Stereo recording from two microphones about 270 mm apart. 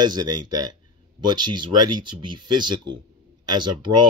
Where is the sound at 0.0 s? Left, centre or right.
Centre.